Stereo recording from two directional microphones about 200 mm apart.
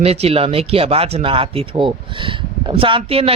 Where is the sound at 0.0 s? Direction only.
30° right (ahead or behind).